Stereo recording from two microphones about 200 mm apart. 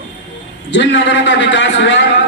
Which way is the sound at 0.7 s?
60° left (ahead or behind).